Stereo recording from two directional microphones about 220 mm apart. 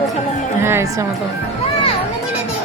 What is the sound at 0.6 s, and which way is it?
Speech, 10° right (ahead or behind).